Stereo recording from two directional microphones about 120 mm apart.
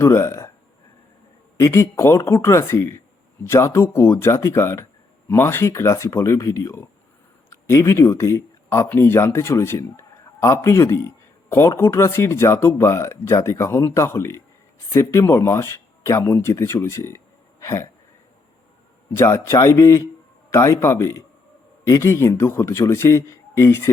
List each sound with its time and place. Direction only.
0.0 s speech: 20° left (ahead or behind)
1.5 s speech: 25° left (ahead or behind)
17.6 s throat clearing: 25° left (ahead or behind)
19.1 s speech: 25° left (ahead or behind)